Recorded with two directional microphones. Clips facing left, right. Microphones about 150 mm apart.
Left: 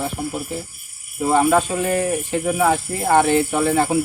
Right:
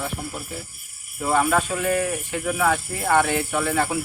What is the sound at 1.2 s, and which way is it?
Speech, 25° left (ahead or behind).